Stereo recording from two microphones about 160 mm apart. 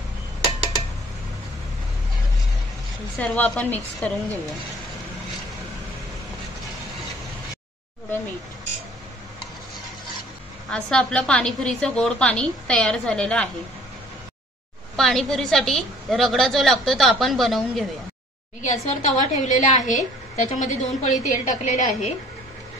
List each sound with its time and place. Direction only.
3.2 s a woman's voice: 10° left (ahead or behind)
10.7 s a woman's voice: 5° left (ahead or behind)
15.0 s a woman's voice: centre (ahead or behind)
18.6 s a woman's voice: 50° left (ahead or behind)